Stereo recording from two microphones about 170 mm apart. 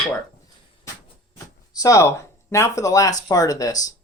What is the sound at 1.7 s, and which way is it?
Speech, 20° left (ahead or behind).